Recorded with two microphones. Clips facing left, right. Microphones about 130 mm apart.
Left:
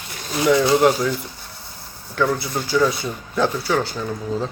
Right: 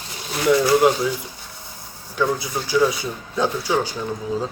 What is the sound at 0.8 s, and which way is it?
Speech, 10° right (ahead or behind).